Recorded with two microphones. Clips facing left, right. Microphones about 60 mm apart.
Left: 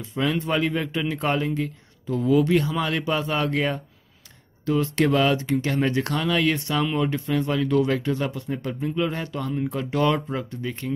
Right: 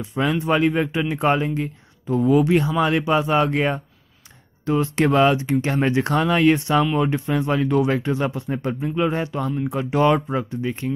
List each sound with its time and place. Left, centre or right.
0.0 s speech: centre